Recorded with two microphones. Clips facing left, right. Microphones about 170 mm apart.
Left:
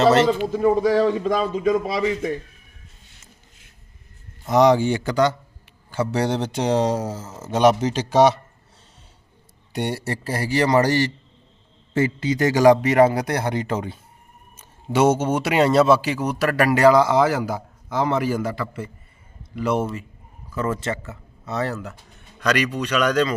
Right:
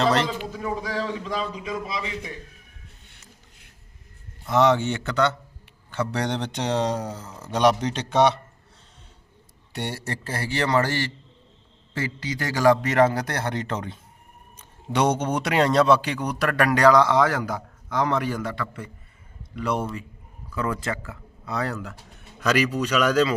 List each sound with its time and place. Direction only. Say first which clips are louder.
0.0 s a man's voice: left 6 dB; 5° left (ahead or behind)
0.3 s a man's voice: left 11 dB; 45° left (ahead or behind)
4.4 s a man's voice: left 4 dB; 15° left (ahead or behind)
9.7 s a man's voice: left 5 dB; 10° left (ahead or behind)
20.8 s a man's voice: left 3 dB; 25° left (ahead or behind)
21.1 s speech: left 2 dB; centre (ahead or behind)